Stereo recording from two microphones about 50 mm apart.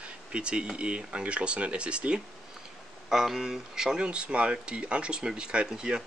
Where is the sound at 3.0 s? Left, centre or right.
Centre.